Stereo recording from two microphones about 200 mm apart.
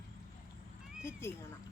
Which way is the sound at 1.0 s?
10° left (ahead or behind).